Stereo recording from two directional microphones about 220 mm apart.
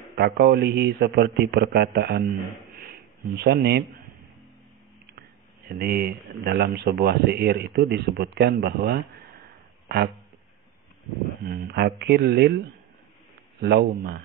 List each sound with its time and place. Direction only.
0.1 s speech: 45° right (ahead or behind)
2.8 s a sound: 45° right (ahead or behind)
5.7 s speech: 45° right (ahead or behind)
11.4 s speech: 45° right (ahead or behind)
13.6 s speech: 45° right (ahead or behind)